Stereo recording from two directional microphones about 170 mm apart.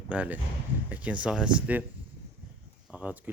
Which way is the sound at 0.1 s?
10° right (ahead or behind).